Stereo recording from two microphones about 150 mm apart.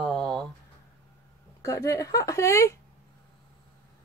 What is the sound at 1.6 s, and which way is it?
Speech, 20° left (ahead or behind).